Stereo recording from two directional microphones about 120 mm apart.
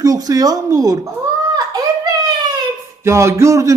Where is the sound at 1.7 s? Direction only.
30° right (ahead or behind).